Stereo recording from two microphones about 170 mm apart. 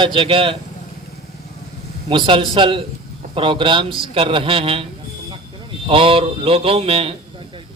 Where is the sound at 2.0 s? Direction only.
30° right (ahead or behind).